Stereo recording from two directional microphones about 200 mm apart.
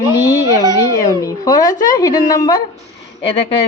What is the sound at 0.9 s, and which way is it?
Speech, 15° left (ahead or behind).